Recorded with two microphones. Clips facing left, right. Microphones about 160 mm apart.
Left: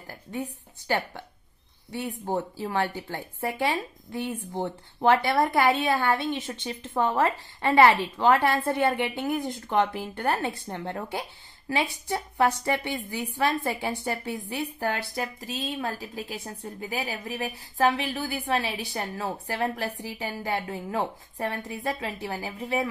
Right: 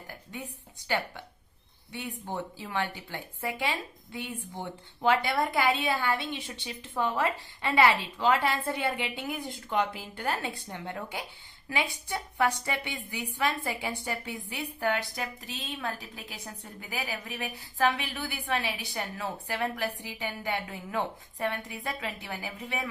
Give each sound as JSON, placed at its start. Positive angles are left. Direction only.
{"t": 0.3, "sound": "a woman's voice", "side_deg": 40}
{"t": 12.4, "sound": "a woman's voice", "side_deg": 40}